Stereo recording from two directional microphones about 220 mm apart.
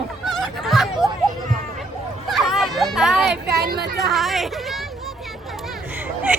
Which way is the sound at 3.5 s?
45° right (ahead or behind).